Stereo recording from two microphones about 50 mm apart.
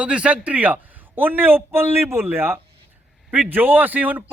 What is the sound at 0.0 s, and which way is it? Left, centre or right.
Speech, right.